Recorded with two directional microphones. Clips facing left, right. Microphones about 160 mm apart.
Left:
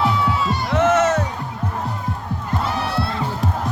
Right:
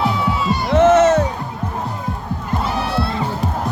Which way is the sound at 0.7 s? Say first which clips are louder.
Right 6 dB; 25° right (ahead or behind).